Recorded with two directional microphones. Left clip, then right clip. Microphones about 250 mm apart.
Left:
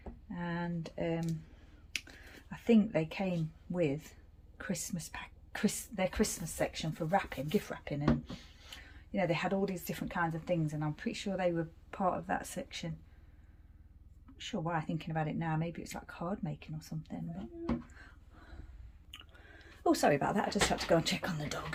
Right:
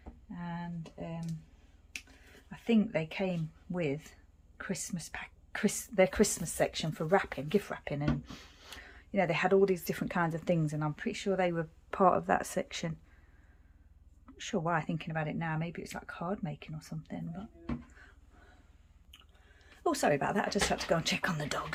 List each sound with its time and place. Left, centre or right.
0.3 s a sound: centre
1.9 s finger snapping: centre
3.8 s a woman's voice: centre
6.0 s speech: right
8.2 s speech: right
14.3 s speech: centre
19.1 s speech: centre